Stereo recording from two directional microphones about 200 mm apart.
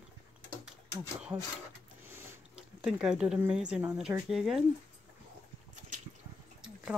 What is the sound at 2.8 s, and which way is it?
Speech, 5° right (ahead or behind).